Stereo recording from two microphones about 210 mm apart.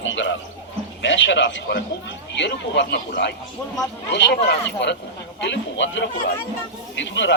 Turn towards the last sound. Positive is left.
turn(degrees=60)  # may be behind; listen again after turning